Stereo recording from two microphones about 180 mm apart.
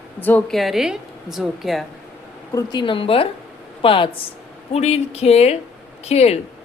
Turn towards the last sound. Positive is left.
turn(degrees=35)  # may be behind; listen again after turning